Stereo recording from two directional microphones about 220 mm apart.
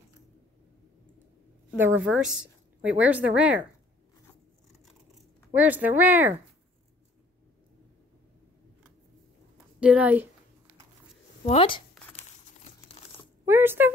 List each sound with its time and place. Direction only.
1.7 s a woman's voice: 10° right (ahead or behind)
5.5 s speech: 5° right (ahead or behind)
9.8 s speech: 5° right (ahead or behind)
11.4 s speech: 25° left (ahead or behind)
13.5 s speech: 10° right (ahead or behind)